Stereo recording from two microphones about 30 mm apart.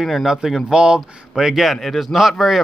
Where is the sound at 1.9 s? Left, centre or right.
Centre.